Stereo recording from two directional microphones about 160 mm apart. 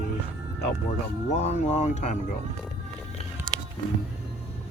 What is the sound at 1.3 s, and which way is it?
Speech, 45° left (ahead or behind).